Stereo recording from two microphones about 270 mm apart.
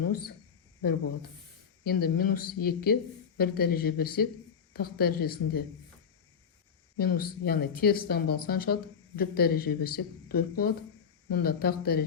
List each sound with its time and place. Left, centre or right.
0.0 s speech: left
1.8 s speech: left
6.9 s speech: left